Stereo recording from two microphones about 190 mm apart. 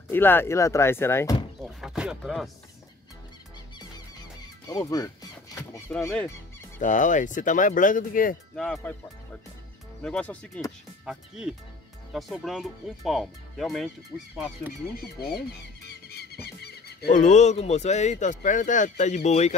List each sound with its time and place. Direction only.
0.1 s speech: 10° left (ahead or behind)
1.6 s speech: 5° right (ahead or behind)
3.7 s music: 20° left (ahead or behind)
6.8 s speech: 40° left (ahead or behind)
8.5 s speech: 5° left (ahead or behind)
10.0 s speech: 5° left (ahead or behind)
15.1 s speech: 55° left (ahead or behind)
16.1 s a sound: 55° left (ahead or behind)
17.1 s speech: 40° left (ahead or behind)